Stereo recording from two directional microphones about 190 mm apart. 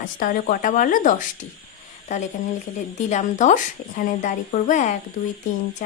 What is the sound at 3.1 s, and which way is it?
Speech, 40° left (ahead or behind).